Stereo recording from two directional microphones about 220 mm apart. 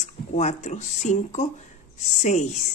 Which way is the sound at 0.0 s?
30° left (ahead or behind).